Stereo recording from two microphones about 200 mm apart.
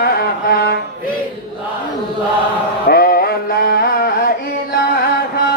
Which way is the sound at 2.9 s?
50° left (ahead or behind).